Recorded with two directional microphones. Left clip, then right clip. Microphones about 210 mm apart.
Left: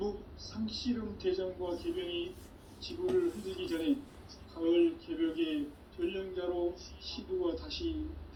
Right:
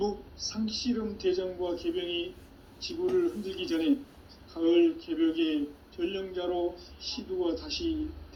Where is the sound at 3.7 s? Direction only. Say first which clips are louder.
Right 6 dB; 45° right (ahead or behind).